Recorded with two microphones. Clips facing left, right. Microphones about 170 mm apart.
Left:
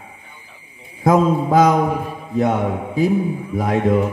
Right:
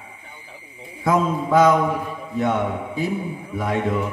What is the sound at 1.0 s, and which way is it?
Mantra, 40° left (ahead or behind).